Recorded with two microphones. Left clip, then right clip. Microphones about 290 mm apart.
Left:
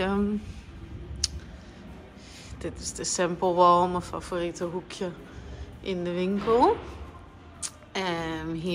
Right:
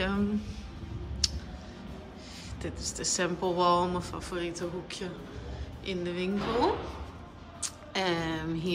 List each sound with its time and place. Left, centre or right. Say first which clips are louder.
0.0 s speech: left 4 dB; centre
1.2 s clicking: even; centre
2.6 s speech: left 1 dB; centre
7.6 s a woman's voice: even; centre